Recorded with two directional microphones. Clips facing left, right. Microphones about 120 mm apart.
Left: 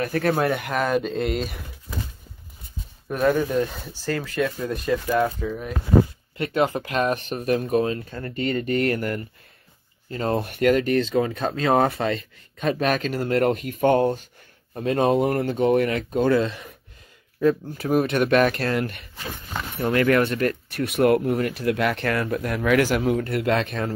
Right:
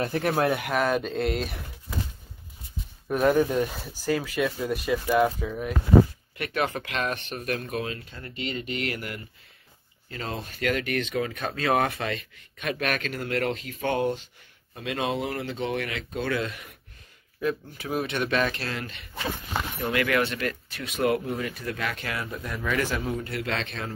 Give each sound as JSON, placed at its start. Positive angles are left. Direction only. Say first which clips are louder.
{"t": 0.0, "sound": "speech", "louder": "left 3 dB", "side_deg": -20}
{"t": 0.3, "sound": "speech", "louder": "left 1 dB", "side_deg": 0}
{"t": 3.1, "sound": "speech", "louder": "left 1 dB", "side_deg": -10}
{"t": 6.3, "sound": "speech", "louder": "left 6 dB", "side_deg": 25}
{"t": 10.3, "sound": "speech", "louder": "left 10 dB", "side_deg": 65}
{"t": 10.7, "sound": "speech", "louder": "left 7 dB", "side_deg": 35}
{"t": 16.3, "sound": "speech", "louder": "left 8 dB", "side_deg": 30}
{"t": 20.8, "sound": "speech", "louder": "left 7 dB", "side_deg": 60}